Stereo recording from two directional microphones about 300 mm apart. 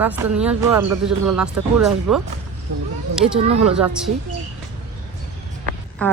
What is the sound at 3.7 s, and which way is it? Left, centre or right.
Speech, centre.